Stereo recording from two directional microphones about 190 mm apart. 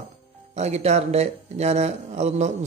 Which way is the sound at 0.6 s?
35° right (ahead or behind).